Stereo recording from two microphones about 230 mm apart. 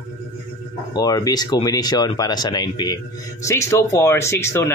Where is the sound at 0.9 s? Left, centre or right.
Centre.